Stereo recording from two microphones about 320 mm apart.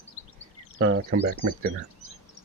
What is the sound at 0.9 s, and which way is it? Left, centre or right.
Speech, right.